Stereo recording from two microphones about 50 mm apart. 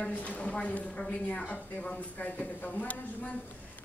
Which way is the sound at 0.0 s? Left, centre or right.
Left.